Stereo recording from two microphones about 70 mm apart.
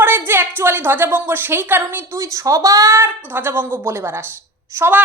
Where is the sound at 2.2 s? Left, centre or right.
Right.